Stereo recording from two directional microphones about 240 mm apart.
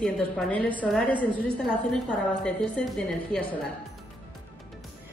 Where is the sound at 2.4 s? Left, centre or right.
Centre.